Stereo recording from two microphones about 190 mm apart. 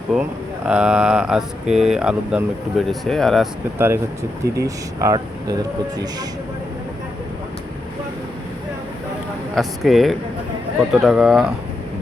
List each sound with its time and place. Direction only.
0.1 s speech: centre (ahead or behind)
3.8 s speech: 10° right (ahead or behind)
9.6 s speech: centre (ahead or behind)